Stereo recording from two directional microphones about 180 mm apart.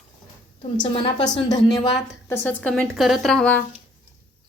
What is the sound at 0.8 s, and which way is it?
Speech, 25° left (ahead or behind).